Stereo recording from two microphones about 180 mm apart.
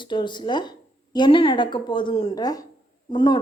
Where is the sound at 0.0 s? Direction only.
25° left (ahead or behind).